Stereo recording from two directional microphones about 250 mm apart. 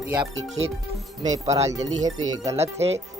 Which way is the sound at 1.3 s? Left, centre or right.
Right.